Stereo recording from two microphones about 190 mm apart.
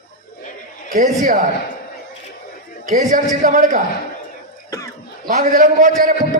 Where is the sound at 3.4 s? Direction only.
45° right (ahead or behind).